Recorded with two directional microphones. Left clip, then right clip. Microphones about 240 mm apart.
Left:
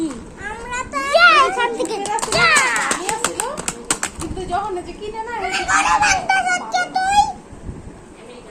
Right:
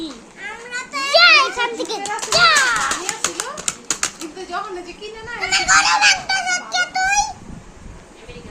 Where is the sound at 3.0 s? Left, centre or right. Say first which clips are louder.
Left 2 dB; centre.